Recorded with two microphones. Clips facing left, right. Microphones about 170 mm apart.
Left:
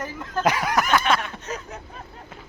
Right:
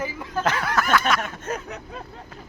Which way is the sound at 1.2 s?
55° right (ahead or behind).